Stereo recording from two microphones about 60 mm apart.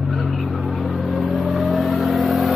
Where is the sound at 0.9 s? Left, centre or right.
Centre.